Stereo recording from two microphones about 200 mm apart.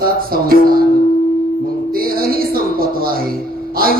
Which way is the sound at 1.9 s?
45° right (ahead or behind).